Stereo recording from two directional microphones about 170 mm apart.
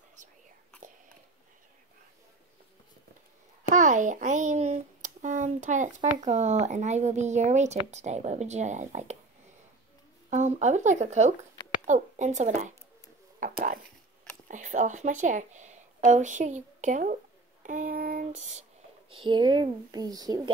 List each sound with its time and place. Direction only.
3.7 s a child's voice: 45° right (ahead or behind)
10.3 s a child's voice: 45° right (ahead or behind)
13.4 s a sound: 50° right (ahead or behind)
14.5 s a woman's voice: 45° right (ahead or behind)
17.6 s a sound: 55° right (ahead or behind)
19.2 s a child's voice: 25° right (ahead or behind)